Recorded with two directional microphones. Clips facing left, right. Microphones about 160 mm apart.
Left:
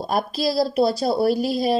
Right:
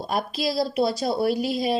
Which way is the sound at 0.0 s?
40° left (ahead or behind).